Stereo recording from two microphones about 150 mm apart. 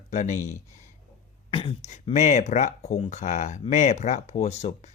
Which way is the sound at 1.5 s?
40° left (ahead or behind).